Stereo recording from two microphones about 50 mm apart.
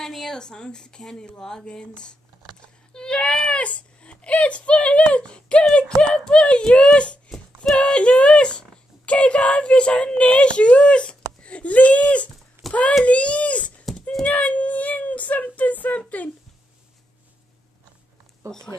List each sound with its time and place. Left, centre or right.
0.0 s speech: centre; by 7.2 s left
7.2 s speech: centre; by 12.0 s left
12.6 s a sound: centre
13.0 s a child's voice: left
18.5 s speech: centre